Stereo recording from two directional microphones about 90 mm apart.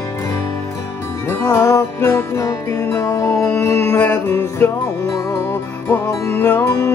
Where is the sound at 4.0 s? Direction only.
25° left (ahead or behind).